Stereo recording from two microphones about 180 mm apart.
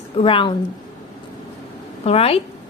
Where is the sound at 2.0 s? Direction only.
35° left (ahead or behind).